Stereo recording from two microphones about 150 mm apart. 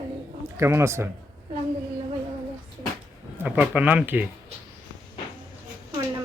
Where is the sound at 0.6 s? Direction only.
20° right (ahead or behind).